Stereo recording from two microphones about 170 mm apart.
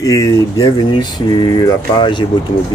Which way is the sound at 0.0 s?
20° left (ahead or behind).